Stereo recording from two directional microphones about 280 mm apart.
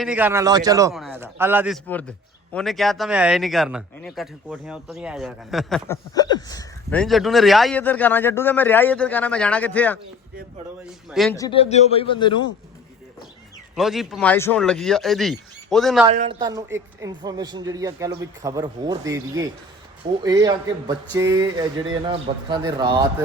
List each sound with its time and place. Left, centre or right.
0.0 s a woman's voice: centre
6.1 s speech: centre
7.0 s a man's voice: centre
11.1 s a man's voice: centre
11.3 s a man's voice: centre
13.7 s a man's voice: centre
16.0 s a woman's voice: right